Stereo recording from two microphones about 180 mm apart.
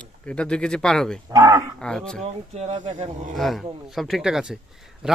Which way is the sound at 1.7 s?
5° left (ahead or behind).